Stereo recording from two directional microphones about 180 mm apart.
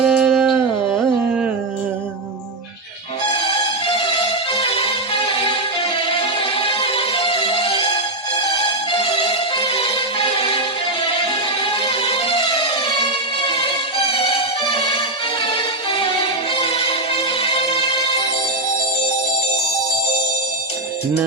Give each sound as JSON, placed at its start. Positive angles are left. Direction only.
{"t": 0.0, "sound": "a sound", "side_deg": -5}
{"t": 3.3, "sound": "music", "side_deg": 30}
{"t": 11.9, "sound": "music", "side_deg": 30}